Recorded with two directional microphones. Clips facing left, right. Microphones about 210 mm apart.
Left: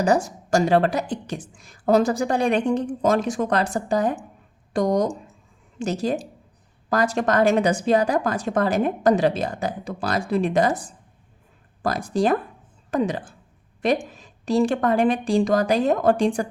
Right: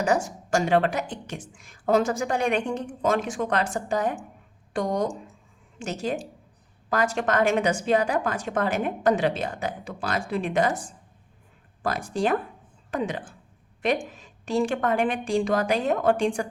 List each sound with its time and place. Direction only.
0.0 s a woman's voice: 35° left (ahead or behind)